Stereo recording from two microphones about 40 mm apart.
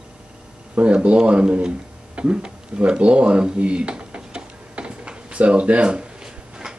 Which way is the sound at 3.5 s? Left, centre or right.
Right.